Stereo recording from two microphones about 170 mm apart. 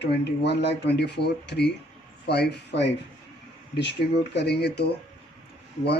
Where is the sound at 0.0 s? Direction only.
85° left.